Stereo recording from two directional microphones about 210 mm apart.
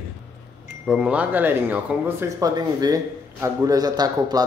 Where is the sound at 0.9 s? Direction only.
5° right (ahead or behind).